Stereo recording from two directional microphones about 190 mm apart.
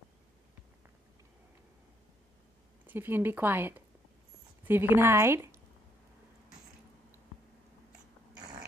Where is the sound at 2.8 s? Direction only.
10° right (ahead or behind).